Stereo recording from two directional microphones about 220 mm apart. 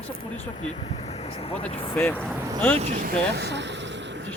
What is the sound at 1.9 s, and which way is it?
Speech, 10° left (ahead or behind).